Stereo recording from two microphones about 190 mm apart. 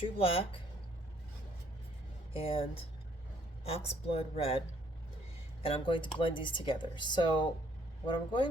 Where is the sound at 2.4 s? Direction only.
30° left (ahead or behind).